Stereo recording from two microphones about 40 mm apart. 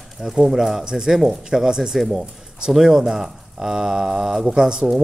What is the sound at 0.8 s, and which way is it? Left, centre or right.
Speech, centre.